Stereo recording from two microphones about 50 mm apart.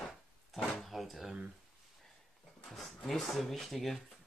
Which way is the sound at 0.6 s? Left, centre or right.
Centre.